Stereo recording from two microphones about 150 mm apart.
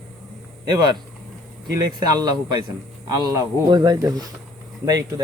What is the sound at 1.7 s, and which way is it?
Speech, 25° right (ahead or behind).